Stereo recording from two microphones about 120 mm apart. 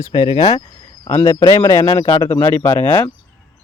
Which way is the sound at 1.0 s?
45° left (ahead or behind).